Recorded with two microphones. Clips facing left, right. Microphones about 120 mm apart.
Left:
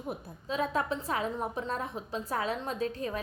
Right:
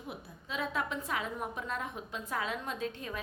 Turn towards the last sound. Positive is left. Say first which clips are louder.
# left 5 dB
turn(degrees=35)  # may be behind; listen again after turning